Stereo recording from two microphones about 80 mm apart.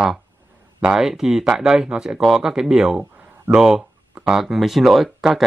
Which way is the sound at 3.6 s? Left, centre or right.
Centre.